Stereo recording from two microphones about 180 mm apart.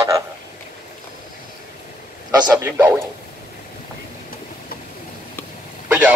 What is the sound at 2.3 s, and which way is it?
Speech, 20° right (ahead or behind).